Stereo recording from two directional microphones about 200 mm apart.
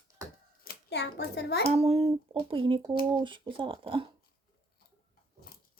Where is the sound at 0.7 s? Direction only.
55° left (ahead or behind).